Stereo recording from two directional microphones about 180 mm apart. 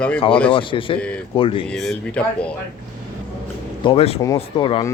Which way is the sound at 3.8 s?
35° left (ahead or behind).